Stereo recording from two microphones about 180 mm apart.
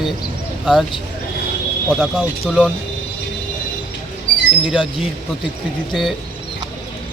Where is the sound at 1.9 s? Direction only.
Centre (ahead or behind).